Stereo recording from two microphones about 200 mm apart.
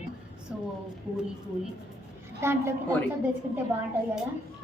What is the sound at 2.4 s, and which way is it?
Speech, 15° right (ahead or behind).